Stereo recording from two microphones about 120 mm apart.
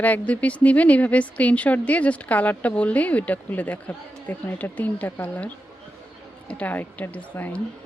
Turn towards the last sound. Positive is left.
turn(degrees=15)  # may be behind; listen again after turning